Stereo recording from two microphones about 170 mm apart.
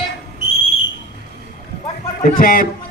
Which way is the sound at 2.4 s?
60° left (ahead or behind).